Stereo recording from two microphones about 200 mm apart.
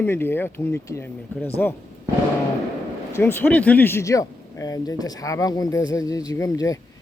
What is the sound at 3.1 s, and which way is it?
Speech, 10° left (ahead or behind).